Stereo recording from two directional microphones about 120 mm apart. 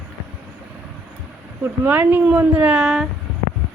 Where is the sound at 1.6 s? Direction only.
15° right (ahead or behind).